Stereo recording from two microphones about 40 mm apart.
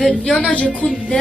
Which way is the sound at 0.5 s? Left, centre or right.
Left.